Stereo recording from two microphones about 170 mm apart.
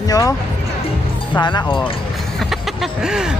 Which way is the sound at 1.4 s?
25° left (ahead or behind).